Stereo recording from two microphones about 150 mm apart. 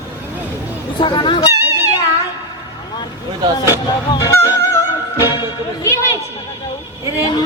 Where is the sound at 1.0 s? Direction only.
30° left (ahead or behind).